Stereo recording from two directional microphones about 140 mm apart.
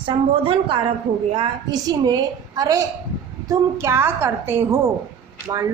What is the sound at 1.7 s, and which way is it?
A woman's voice, 30° right (ahead or behind).